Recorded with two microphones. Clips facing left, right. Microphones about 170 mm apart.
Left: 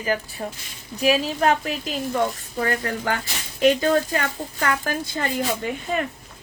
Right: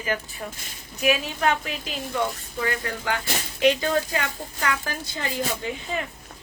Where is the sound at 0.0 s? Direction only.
35° left (ahead or behind).